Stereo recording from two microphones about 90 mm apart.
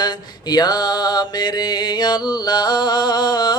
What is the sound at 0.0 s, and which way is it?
Mantra, 50° left (ahead or behind).